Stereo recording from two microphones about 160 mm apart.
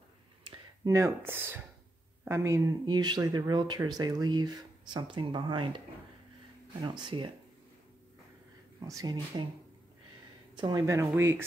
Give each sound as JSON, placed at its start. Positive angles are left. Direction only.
{"t": 0.8, "sound": "speech", "side_deg": -20}
{"t": 6.8, "sound": "speech", "side_deg": -30}
{"t": 8.7, "sound": "speech", "side_deg": -20}
{"t": 10.5, "sound": "speech", "side_deg": -25}